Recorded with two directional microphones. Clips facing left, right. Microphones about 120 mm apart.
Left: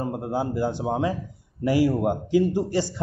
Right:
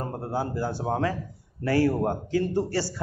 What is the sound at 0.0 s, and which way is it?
A man's voice, 15° left (ahead or behind).